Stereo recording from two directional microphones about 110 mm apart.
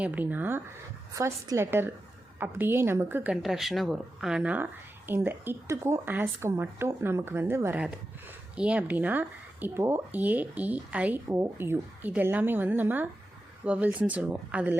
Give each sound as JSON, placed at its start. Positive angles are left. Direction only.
{"t": 0.0, "sound": "speech", "side_deg": -15}
{"t": 1.1, "sound": "speech", "side_deg": -30}
{"t": 3.4, "sound": "speech", "side_deg": 0}
{"t": 8.5, "sound": "speech", "side_deg": -10}